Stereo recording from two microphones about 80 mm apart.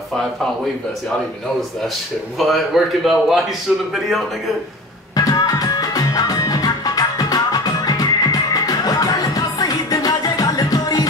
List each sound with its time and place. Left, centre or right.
2.3 s a man's voice: centre
5.1 s music: left